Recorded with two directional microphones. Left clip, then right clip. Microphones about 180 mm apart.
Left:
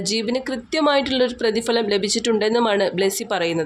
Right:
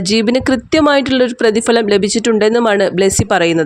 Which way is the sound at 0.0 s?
45° right (ahead or behind).